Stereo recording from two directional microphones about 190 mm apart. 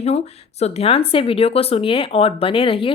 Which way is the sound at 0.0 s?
35° left (ahead or behind).